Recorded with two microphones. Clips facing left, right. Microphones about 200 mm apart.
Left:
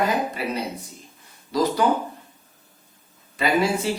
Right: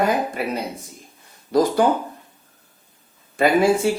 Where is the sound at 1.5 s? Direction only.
50° right (ahead or behind).